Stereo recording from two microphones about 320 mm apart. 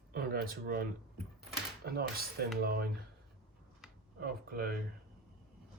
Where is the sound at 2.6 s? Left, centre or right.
Right.